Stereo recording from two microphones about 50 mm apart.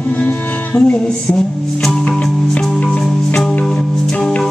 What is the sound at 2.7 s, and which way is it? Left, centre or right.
Music, left.